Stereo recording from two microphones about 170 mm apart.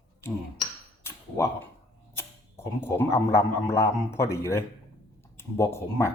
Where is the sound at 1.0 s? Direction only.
15° left (ahead or behind).